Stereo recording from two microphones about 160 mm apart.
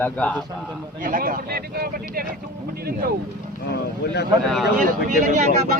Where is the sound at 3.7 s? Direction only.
90° left.